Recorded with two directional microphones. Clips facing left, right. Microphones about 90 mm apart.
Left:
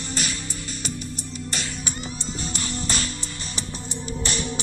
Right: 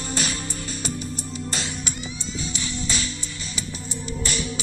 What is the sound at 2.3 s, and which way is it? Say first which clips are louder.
Music: right 1 dB; 55° left (ahead or behind).